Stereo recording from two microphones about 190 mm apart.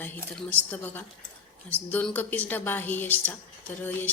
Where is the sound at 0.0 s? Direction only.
10° left (ahead or behind).